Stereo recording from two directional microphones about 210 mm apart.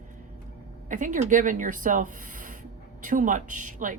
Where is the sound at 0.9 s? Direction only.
35° right (ahead or behind).